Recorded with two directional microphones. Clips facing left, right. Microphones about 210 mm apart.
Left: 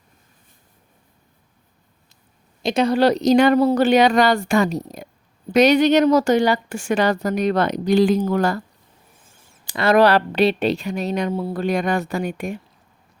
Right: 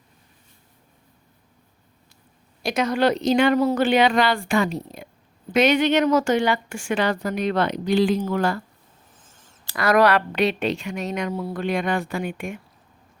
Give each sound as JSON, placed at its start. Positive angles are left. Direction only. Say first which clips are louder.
{"t": 2.6, "sound": "a woman's voice", "louder": "left 4 dB", "side_deg": 25}
{"t": 9.2, "sound": "a sound", "louder": "left 1 dB", "side_deg": 10}
{"t": 9.7, "sound": "a woman's voice", "louder": "left 3 dB", "side_deg": 25}